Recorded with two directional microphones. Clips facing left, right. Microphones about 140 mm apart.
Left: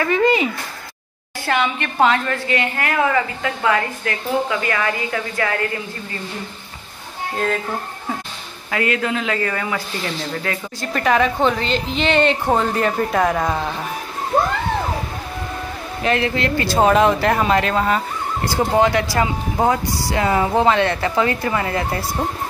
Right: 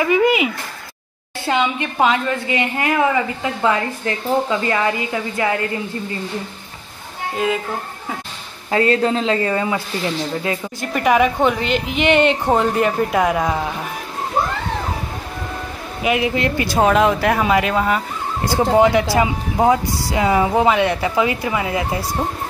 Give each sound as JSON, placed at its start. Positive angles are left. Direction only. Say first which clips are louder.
{"t": 0.0, "sound": "a woman's voice", "louder": "right 1 dB", "side_deg": -10}
{"t": 7.3, "sound": "speech", "louder": "right 2 dB", "side_deg": -5}
{"t": 8.6, "sound": "a woman's voice", "louder": "right 5 dB", "side_deg": -30}
{"t": 16.0, "sound": "speech", "louder": "right 1 dB", "side_deg": -10}
{"t": 16.7, "sound": "speech", "louder": "left 1 dB", "side_deg": 0}